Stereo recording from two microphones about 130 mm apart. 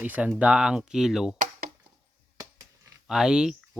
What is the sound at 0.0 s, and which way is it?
Speech, 10° right (ahead or behind).